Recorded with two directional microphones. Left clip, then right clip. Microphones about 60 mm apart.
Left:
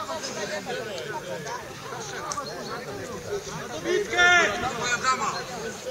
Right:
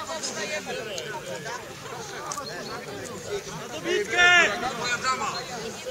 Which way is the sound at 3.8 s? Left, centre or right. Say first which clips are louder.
Even; right.